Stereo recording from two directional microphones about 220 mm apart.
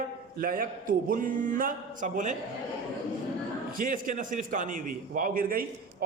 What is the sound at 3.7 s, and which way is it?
A man's voice, 40° right (ahead or behind).